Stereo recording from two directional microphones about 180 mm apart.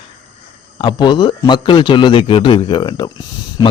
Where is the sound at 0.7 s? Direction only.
25° left (ahead or behind).